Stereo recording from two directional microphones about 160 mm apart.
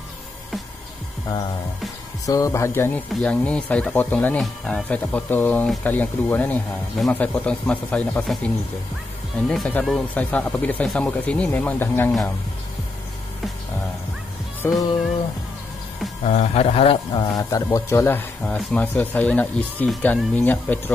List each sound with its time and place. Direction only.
2.2 s speech: 20° left (ahead or behind)
9.5 s speech: 5° left (ahead or behind)
14.6 s speech: 15° left (ahead or behind)
16.3 s a man's voice: 40° left (ahead or behind)
17.1 s a man's voice: 25° left (ahead or behind)